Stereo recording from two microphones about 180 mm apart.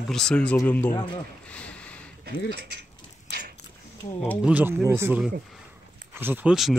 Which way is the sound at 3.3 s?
60° right (ahead or behind).